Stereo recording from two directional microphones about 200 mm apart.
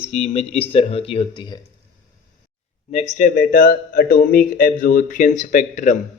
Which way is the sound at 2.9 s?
35° left (ahead or behind).